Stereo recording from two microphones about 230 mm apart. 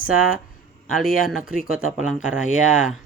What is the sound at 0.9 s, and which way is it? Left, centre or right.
Speech, centre.